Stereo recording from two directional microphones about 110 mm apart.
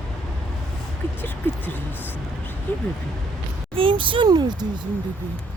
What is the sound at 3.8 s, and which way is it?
Speech, 50° right (ahead or behind).